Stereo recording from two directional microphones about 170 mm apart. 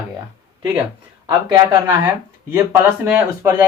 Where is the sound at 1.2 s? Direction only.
25° right (ahead or behind).